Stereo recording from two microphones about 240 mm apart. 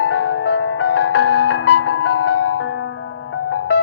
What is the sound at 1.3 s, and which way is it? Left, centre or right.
Music, left.